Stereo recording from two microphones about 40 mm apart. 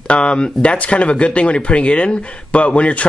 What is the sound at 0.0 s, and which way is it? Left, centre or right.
Speech, left.